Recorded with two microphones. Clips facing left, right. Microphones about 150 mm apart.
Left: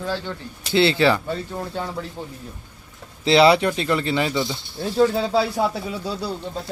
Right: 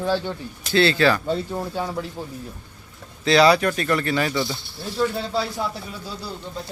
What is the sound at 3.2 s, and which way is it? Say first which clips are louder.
Speech: left 1 dB; 25° left (ahead or behind).